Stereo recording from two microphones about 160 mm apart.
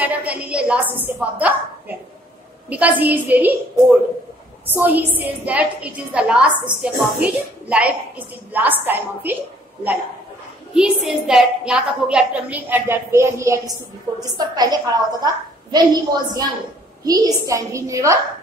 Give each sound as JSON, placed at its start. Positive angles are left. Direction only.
{"t": 0.0, "sound": "a woman's voice", "side_deg": -10}
{"t": 4.6, "sound": "a woman's voice", "side_deg": -10}
{"t": 10.7, "sound": "a woman's voice", "side_deg": -5}